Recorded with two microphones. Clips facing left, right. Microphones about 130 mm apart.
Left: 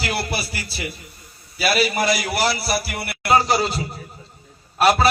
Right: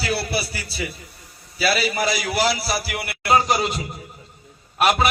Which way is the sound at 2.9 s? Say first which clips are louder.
Even; 90° right.